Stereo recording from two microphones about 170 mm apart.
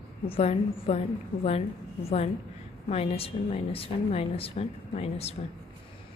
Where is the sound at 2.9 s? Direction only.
35° left (ahead or behind).